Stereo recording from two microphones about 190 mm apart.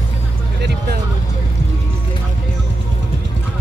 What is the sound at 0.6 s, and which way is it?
Vehicle, 60° right (ahead or behind).